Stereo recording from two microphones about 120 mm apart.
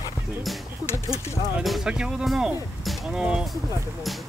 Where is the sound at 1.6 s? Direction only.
Centre (ahead or behind).